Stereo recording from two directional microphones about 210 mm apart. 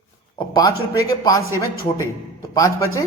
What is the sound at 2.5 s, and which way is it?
Speech, 15° left (ahead or behind).